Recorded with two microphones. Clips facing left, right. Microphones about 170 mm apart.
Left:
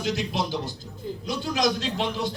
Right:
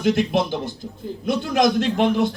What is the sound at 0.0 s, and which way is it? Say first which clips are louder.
A man's voice: right 8 dB; 55° right (ahead or behind).